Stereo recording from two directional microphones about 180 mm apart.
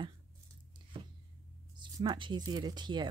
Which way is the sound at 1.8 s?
25° right (ahead or behind).